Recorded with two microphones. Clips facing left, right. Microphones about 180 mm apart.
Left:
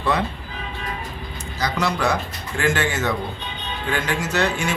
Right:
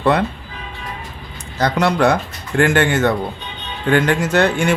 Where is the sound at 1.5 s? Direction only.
60° right (ahead or behind).